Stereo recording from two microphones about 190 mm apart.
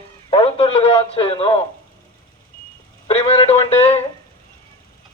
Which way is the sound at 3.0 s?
30° left (ahead or behind).